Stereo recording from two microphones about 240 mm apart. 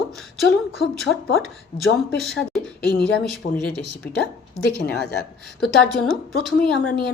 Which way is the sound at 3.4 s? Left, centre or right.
Left.